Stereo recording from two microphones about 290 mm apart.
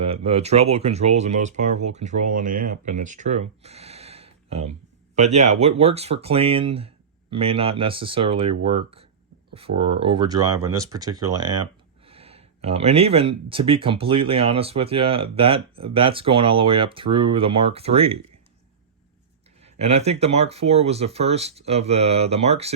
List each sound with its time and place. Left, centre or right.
0.0 s speech: centre
10.5 s speech: right
10.8 s speech: centre
19.6 s speech: right